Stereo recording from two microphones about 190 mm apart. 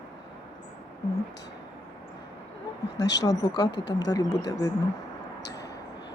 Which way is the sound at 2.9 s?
65° left (ahead or behind).